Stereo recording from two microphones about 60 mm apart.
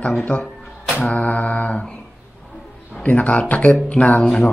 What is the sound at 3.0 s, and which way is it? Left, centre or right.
Speech, left.